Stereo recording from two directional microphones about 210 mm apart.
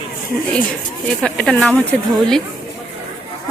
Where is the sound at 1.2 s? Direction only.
5° left (ahead or behind).